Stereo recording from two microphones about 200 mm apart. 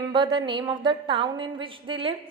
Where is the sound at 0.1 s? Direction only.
20° right (ahead or behind).